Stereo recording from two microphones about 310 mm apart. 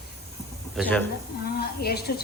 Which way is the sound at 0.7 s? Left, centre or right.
Centre.